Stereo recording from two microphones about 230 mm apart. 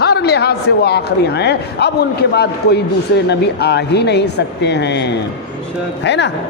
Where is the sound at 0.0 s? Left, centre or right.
Left.